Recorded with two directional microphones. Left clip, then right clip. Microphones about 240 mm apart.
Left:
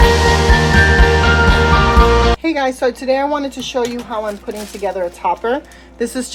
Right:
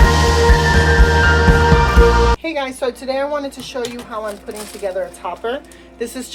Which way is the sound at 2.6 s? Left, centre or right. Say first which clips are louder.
Left 5 dB; centre.